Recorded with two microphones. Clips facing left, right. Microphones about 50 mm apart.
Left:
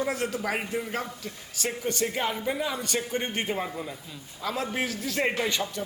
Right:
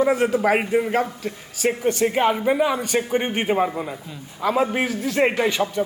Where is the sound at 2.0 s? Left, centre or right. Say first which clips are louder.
Right 12 dB; right.